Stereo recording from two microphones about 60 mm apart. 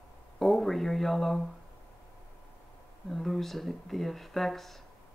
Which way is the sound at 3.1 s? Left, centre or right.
Centre.